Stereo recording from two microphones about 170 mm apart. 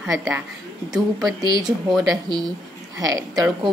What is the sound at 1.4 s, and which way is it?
Speech, 25° right (ahead or behind).